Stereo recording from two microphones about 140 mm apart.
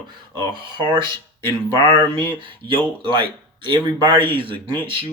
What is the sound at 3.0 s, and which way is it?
Speech, 35° right (ahead or behind).